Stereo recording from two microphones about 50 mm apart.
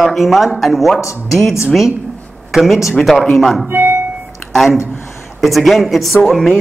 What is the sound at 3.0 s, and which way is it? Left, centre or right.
Speech, centre.